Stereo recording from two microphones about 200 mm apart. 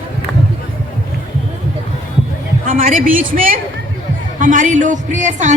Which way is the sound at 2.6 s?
40° right (ahead or behind).